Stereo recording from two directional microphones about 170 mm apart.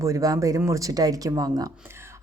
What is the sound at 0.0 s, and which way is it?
A woman's voice, 20° right (ahead or behind).